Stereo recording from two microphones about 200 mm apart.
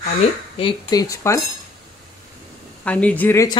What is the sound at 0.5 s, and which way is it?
Speech, 20° left (ahead or behind).